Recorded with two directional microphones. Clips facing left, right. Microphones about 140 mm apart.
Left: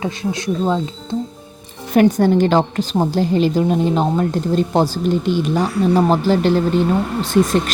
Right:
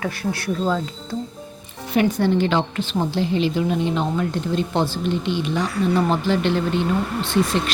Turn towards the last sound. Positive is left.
turn(degrees=45)  # may be behind; listen again after turning